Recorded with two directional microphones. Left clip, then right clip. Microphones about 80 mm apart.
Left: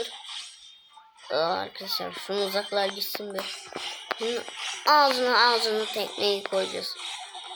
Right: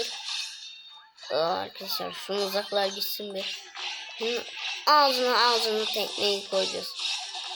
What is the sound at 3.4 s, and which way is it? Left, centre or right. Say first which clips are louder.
Speech: even; left.